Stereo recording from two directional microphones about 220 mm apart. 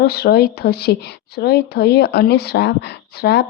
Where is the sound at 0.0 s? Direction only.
45° left (ahead or behind).